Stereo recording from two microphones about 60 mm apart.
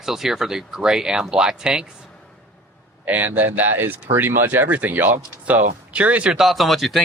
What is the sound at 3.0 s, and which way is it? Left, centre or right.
Speech, right.